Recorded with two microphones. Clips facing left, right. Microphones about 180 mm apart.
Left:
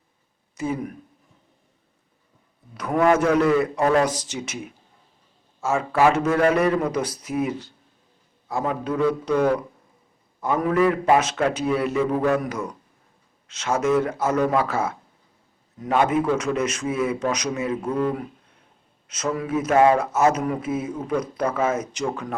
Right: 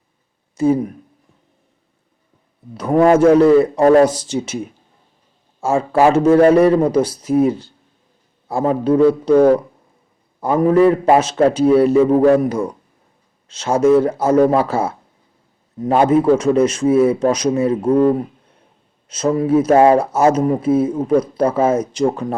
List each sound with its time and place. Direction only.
0.5 s speech: 30° right (ahead or behind)
2.7 s a man's voice: 30° right (ahead or behind)